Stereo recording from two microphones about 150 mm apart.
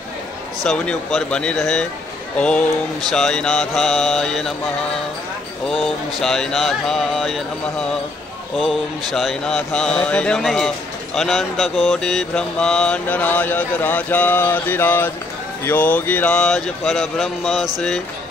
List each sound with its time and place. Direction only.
0.7 s speech: 5° left (ahead or behind)
2.3 s mantra: 5° left (ahead or behind)
3.1 s speech: 5° left (ahead or behind)
6.2 s speech: 5° left (ahead or behind)
8.5 s speech: centre (ahead or behind)
11.1 s mantra: centre (ahead or behind)
15.6 s speech: 10° left (ahead or behind)